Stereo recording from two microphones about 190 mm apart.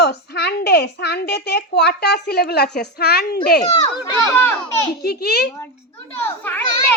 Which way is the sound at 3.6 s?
15° left (ahead or behind).